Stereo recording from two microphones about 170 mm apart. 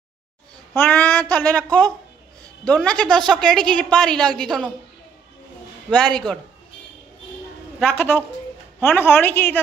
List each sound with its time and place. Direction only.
0.7 s a woman's voice: 10° left (ahead or behind)
5.9 s a woman's voice: 5° left (ahead or behind)
7.8 s a woman's voice: 15° left (ahead or behind)